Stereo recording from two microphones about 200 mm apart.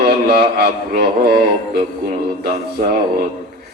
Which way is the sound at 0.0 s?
50° right (ahead or behind).